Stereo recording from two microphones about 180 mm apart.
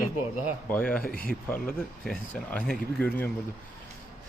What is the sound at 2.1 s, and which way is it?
Speech, 5° left (ahead or behind).